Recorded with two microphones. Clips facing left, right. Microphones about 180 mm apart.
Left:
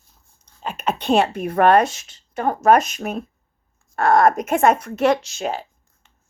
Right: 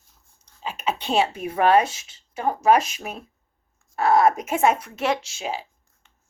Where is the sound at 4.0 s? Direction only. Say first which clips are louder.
Left 2 dB; 5° right (ahead or behind).